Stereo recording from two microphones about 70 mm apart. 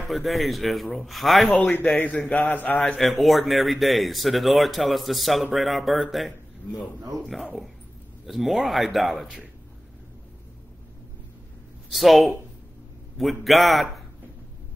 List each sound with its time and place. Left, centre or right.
0.0 s speech: centre
1.5 s mantra: left
3.0 s speech: centre
11.9 s speech: centre